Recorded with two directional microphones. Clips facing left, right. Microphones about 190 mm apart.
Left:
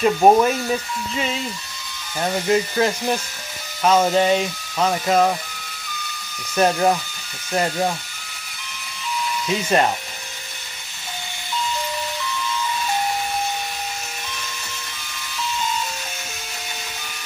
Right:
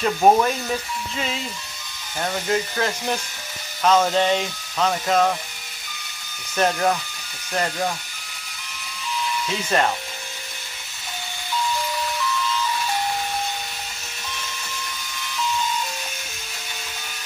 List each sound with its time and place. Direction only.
0.0 s speech: 15° left (ahead or behind)
2.5 s speech: 5° left (ahead or behind)
6.5 s speech: 10° left (ahead or behind)
9.7 s speech: 20° left (ahead or behind)